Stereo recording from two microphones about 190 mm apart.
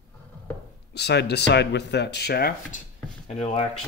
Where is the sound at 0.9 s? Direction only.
60° left (ahead or behind).